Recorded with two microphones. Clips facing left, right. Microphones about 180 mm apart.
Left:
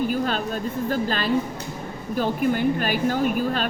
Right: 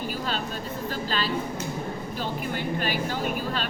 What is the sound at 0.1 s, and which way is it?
A woman's voice, 50° left (ahead or behind).